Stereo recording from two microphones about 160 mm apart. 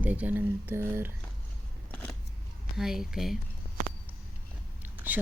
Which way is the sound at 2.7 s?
Centre (ahead or behind).